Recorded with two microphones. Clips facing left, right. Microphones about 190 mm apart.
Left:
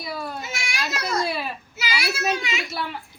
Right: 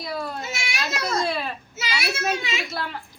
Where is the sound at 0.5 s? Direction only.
25° right (ahead or behind).